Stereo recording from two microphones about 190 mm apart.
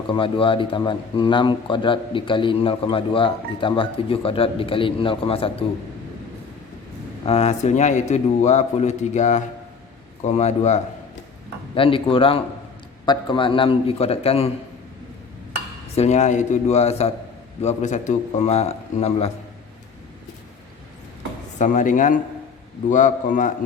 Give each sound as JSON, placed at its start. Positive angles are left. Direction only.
{"t": 0.1, "sound": "a man's voice", "side_deg": 25}
{"t": 7.3, "sound": "a man's voice", "side_deg": 35}
{"t": 16.0, "sound": "a man's voice", "side_deg": 35}
{"t": 21.6, "sound": "a man's voice", "side_deg": 40}